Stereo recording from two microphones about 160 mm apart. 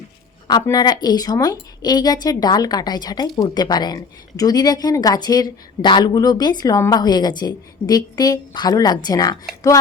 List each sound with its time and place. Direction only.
0.4 s a woman's voice: 25° left (ahead or behind)